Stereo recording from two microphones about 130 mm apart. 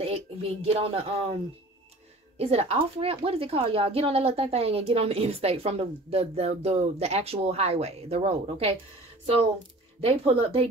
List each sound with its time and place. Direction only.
0.0 s music: 50° right (ahead or behind)
2.3 s speech: 50° right (ahead or behind)
10.0 s speech: 45° right (ahead or behind)